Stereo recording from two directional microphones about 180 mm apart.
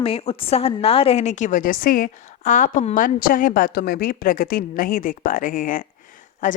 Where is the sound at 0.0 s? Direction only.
30° left (ahead or behind).